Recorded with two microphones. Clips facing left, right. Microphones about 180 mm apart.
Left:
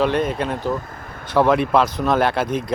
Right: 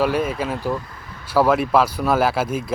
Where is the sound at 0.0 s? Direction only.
5° right (ahead or behind).